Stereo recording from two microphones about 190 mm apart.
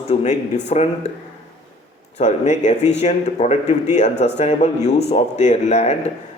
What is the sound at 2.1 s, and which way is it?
A man's voice, 35° left (ahead or behind).